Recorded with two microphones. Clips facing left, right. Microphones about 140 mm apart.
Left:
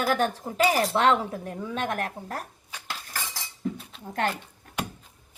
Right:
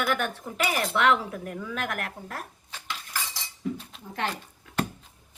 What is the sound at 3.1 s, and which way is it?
Cutlery, 50° left (ahead or behind).